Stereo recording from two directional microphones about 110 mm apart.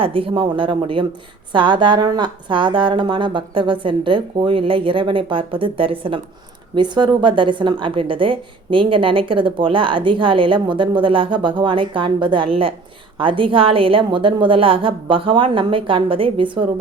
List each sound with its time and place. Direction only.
0.0 s a woman's voice: 55° right (ahead or behind)
6.7 s a woman's voice: 45° right (ahead or behind)